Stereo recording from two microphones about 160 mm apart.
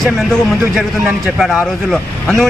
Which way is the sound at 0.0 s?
5° left (ahead or behind).